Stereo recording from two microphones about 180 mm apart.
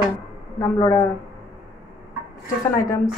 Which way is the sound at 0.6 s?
15° left (ahead or behind).